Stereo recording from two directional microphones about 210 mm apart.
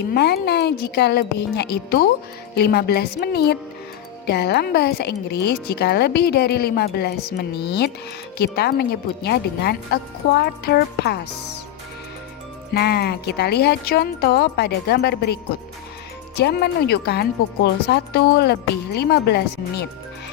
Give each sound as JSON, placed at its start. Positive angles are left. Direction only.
{"t": 0.1, "sound": "speech", "side_deg": 50}
{"t": 12.7, "sound": "speech", "side_deg": 50}